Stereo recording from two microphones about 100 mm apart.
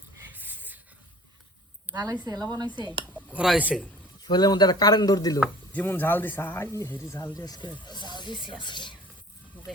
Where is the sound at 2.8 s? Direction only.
50° right (ahead or behind).